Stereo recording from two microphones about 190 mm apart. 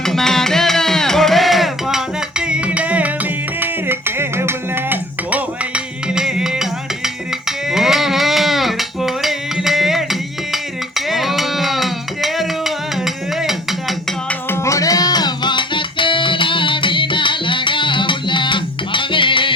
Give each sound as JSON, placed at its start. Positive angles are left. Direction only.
{"t": 0.0, "sound": "music", "side_deg": 0}
{"t": 13.4, "sound": "a sound", "side_deg": 0}
{"t": 14.3, "sound": "music", "side_deg": 15}